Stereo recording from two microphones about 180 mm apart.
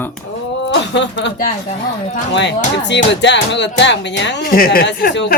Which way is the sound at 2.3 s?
75° left (ahead or behind).